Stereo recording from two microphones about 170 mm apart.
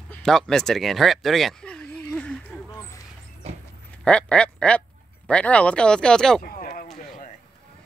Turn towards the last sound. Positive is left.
turn(degrees=55)  # may be behind; listen again after turning